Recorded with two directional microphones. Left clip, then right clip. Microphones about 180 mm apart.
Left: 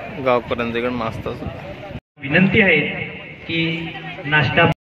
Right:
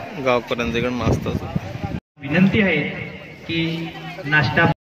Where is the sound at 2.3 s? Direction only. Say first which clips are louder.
Left 4 dB; 75° right (ahead or behind).